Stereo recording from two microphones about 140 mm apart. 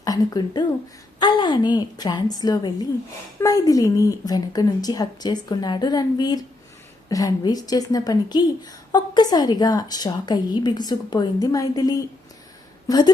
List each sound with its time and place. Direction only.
0.0 s a woman's voice: 25° left (ahead or behind)